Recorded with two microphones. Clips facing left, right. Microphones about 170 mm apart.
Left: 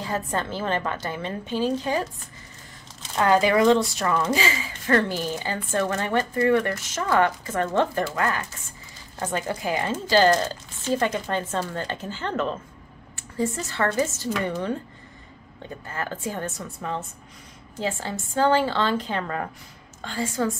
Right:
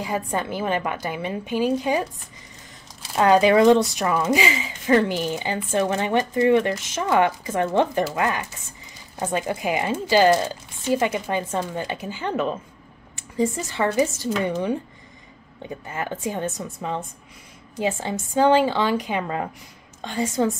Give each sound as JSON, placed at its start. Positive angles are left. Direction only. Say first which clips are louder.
{"t": 0.0, "sound": "a woman's voice", "louder": "right 2 dB", "side_deg": -10}